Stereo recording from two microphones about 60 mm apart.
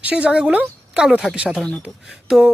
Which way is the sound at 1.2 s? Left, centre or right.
Centre.